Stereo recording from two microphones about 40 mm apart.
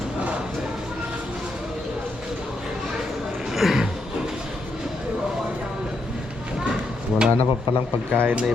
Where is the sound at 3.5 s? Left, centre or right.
Centre.